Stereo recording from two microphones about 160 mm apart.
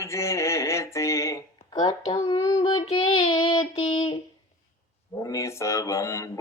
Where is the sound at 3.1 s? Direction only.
35° left (ahead or behind).